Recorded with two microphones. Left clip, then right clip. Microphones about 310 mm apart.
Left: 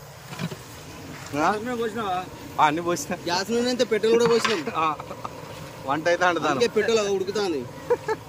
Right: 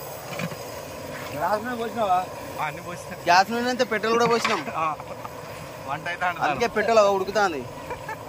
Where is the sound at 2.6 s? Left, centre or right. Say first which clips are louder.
Left 9 dB; left.